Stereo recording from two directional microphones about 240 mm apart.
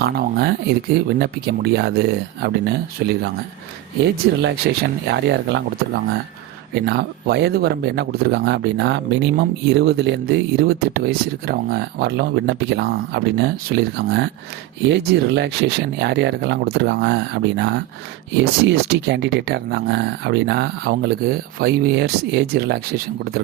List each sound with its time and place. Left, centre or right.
0.0 s speech: right